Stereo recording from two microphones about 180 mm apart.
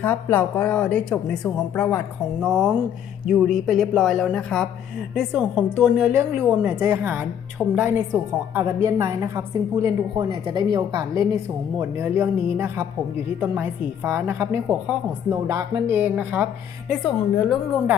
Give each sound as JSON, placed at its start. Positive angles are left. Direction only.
{"t": 0.0, "sound": "speech", "side_deg": 10}
{"t": 2.4, "sound": "a woman's voice", "side_deg": -5}
{"t": 11.8, "sound": "a woman's voice", "side_deg": -15}
{"t": 17.0, "sound": "speech", "side_deg": 0}